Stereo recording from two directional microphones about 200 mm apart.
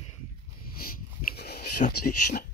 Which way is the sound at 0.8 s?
50° left (ahead or behind).